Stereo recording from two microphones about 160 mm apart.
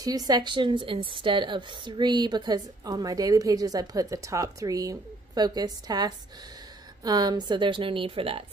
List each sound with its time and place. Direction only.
0.0 s a woman's voice: 25° right (ahead or behind)